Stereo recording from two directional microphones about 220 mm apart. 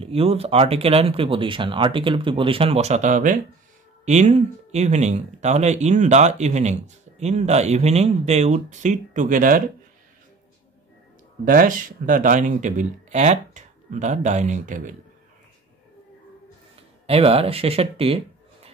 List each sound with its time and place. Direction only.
0.0 s speech: 25° right (ahead or behind)
11.4 s speech: 40° right (ahead or behind)
17.0 s speech: 25° right (ahead or behind)